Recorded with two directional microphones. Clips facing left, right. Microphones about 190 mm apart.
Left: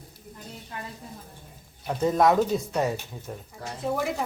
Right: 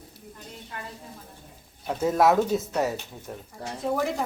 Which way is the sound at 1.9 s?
5° right (ahead or behind).